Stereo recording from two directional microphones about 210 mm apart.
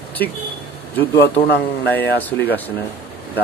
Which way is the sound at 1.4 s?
55° left (ahead or behind).